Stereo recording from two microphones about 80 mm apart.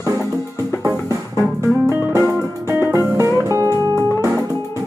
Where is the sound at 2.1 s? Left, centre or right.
Right.